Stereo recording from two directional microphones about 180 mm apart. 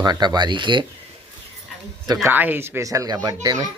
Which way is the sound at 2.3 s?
10° right (ahead or behind).